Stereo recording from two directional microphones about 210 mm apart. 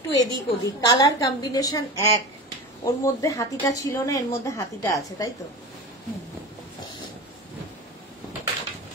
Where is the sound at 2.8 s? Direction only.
15° left (ahead or behind).